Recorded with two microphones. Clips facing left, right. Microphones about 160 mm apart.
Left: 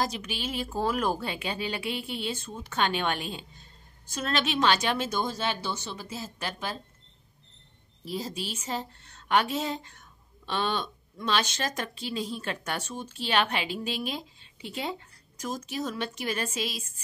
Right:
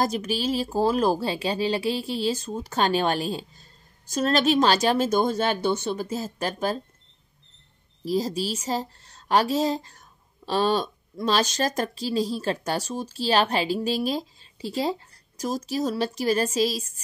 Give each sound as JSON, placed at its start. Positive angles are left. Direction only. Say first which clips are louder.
{"t": 0.0, "sound": "a woman's voice", "louder": "right 6 dB", "side_deg": -45}
{"t": 8.0, "sound": "speech", "louder": "right 9 dB", "side_deg": -40}